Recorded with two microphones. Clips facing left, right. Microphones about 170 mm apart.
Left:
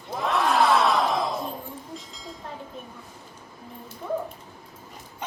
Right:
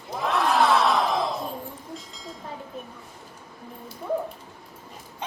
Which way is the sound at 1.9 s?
Centre (ahead or behind).